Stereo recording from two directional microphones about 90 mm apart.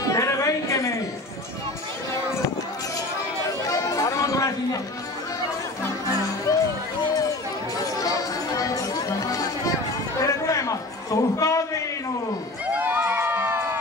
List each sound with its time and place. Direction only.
0.0 s a sound: 35° left (ahead or behind)
3.6 s chatter: 40° left (ahead or behind)
6.5 s music: 40° left (ahead or behind)
8.5 s chatter: 40° left (ahead or behind)
10.2 s a sound: 40° left (ahead or behind)
12.6 s crowd: 15° right (ahead or behind)